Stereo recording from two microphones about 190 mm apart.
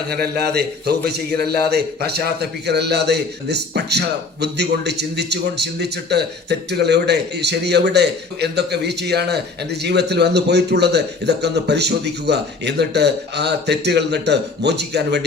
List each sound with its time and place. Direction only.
0.1 s a man's voice: 55° right (ahead or behind)